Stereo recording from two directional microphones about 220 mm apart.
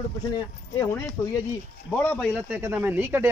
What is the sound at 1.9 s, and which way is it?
Speech, 5° left (ahead or behind).